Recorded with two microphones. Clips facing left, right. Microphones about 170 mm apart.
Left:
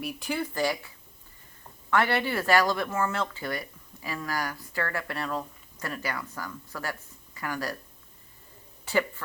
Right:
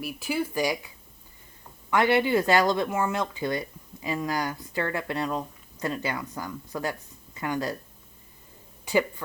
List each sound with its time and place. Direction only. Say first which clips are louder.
0.0 s speech: right 2 dB; 5° right (ahead or behind)
1.9 s speech: right 4 dB; 15° right (ahead or behind)
8.8 s speech: right 3 dB; 15° right (ahead or behind)